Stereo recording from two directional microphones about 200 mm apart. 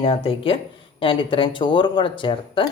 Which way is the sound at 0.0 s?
30° left (ahead or behind).